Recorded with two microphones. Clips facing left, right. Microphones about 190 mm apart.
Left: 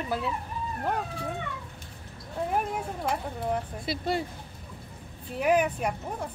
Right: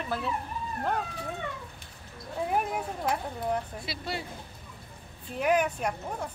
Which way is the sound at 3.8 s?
50° left (ahead or behind).